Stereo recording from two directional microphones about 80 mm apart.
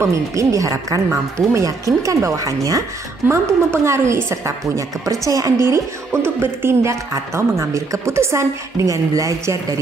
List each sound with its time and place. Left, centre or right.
0.0 s speech: right
3.3 s speech: right